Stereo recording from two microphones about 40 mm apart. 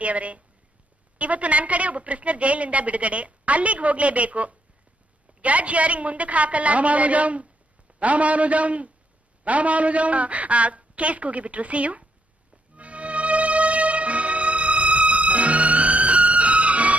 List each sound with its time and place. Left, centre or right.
0.0 s a woman's voice: right
12.7 s music: right